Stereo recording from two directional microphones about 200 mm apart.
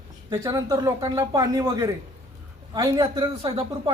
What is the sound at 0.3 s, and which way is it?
Speech, 15° right (ahead or behind).